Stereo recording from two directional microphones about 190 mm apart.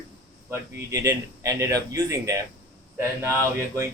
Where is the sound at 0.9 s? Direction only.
15° right (ahead or behind).